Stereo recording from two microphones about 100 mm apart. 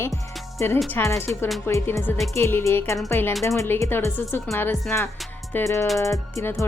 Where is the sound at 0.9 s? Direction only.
30° left (ahead or behind).